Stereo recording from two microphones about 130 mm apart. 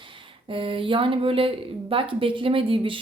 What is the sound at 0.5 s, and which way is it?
A woman's voice, 40° right (ahead or behind).